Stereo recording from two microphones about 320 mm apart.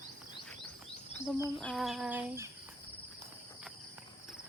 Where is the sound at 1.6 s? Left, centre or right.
Centre.